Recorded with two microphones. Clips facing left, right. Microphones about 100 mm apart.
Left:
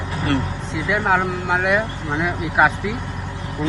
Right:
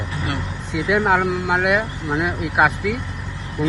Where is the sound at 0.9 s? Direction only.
5° right (ahead or behind).